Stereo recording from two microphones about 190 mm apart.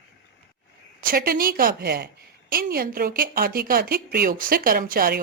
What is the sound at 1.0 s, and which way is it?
Speech, 50° right (ahead or behind).